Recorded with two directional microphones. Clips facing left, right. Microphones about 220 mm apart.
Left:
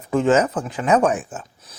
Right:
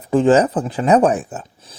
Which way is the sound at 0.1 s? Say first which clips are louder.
Right 4 dB; 35° right (ahead or behind).